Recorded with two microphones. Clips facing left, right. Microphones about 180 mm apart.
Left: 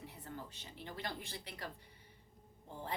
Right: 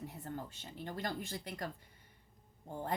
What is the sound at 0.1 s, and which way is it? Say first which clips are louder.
Speech: right 5 dB; 45° right (ahead or behind).